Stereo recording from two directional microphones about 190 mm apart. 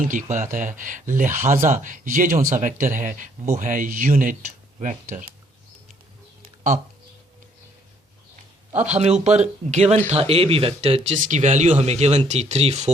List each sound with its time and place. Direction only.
0.0 s a man's voice: 45° right (ahead or behind)
8.7 s speech: 10° right (ahead or behind)
9.0 s speech: 35° right (ahead or behind)